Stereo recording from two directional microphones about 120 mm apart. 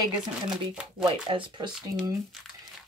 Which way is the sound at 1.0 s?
45° right (ahead or behind).